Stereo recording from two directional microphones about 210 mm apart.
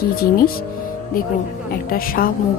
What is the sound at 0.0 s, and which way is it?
Speech, 45° left (ahead or behind).